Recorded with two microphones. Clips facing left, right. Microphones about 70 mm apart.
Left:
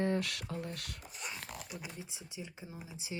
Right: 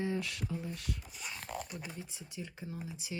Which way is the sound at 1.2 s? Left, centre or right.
Centre.